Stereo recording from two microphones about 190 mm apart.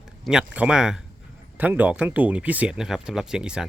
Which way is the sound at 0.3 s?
5° right (ahead or behind).